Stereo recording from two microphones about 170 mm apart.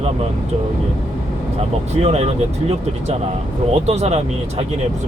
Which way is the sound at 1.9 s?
40° right (ahead or behind).